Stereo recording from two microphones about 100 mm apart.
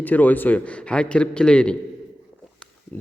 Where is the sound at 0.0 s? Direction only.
15° left (ahead or behind).